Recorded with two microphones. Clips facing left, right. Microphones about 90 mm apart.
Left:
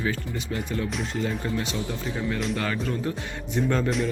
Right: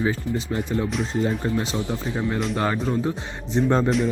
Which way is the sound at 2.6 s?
35° right (ahead or behind).